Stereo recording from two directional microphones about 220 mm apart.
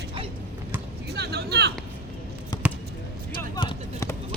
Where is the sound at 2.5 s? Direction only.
20° left (ahead or behind).